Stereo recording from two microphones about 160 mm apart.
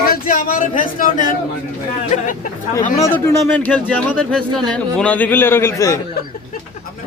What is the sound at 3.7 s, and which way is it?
Speech, 5° left (ahead or behind).